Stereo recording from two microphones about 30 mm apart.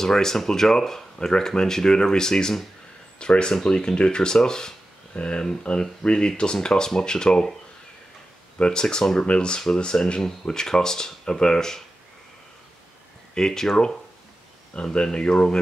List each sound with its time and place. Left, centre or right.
0.0 s speech: centre
5.1 s speech: left
5.8 s speech: left
8.5 s speech: left
8.8 s speech: centre
9.2 s speech: left; by 11.8 s centre
13.3 s speech: centre
14.8 s speech: left